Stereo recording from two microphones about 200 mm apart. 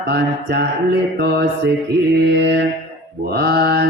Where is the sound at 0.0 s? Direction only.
55° right (ahead or behind).